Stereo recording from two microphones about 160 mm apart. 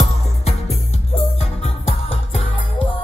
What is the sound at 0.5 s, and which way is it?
Music, 40° left (ahead or behind).